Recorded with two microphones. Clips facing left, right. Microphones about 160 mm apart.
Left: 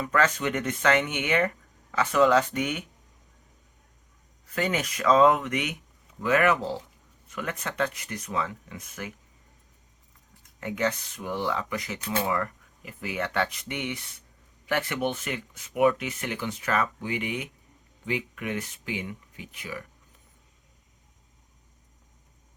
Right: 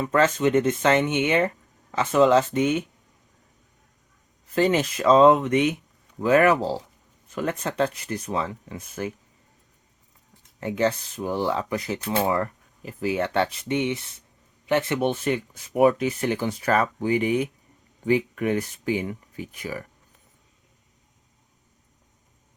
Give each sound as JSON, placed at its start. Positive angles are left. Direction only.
{"t": 0.0, "sound": "speech", "side_deg": -25}
{"t": 4.5, "sound": "speech", "side_deg": -30}
{"t": 10.6, "sound": "speech", "side_deg": -30}